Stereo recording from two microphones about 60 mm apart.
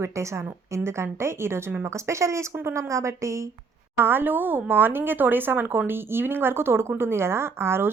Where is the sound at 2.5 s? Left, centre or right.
Right.